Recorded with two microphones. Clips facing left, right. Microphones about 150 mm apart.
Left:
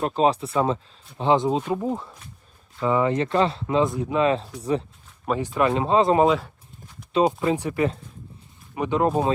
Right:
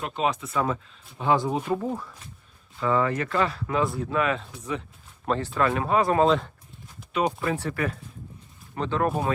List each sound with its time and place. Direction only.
0.0 s speech: 35° left (ahead or behind)
5.2 s speech: 10° left (ahead or behind)
6.2 s speech: 5° left (ahead or behind)